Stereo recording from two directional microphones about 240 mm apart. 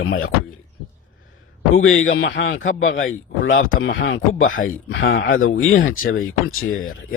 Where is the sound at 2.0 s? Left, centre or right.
Left.